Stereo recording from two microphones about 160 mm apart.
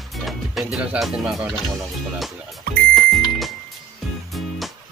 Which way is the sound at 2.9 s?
Centre (ahead or behind).